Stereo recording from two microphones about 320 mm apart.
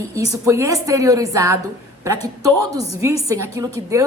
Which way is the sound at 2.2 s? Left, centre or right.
Right.